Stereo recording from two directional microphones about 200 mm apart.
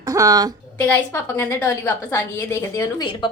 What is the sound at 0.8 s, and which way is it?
A woman's voice, 5° left (ahead or behind).